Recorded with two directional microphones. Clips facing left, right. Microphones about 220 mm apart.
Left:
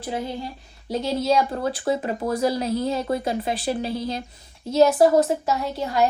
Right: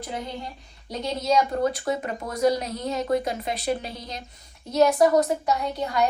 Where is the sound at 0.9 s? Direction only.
5° left (ahead or behind).